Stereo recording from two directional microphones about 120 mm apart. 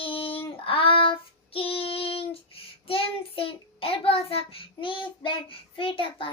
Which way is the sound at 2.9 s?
50° left (ahead or behind).